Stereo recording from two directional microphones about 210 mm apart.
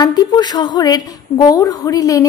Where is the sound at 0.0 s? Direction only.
20° left (ahead or behind).